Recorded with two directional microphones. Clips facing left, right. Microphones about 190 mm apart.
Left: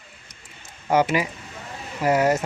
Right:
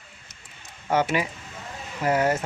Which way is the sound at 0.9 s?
10° left (ahead or behind).